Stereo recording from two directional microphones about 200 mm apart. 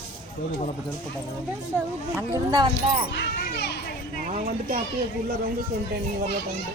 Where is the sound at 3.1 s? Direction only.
55° left (ahead or behind).